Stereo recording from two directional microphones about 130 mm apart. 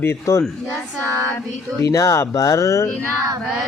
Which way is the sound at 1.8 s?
25° left (ahead or behind).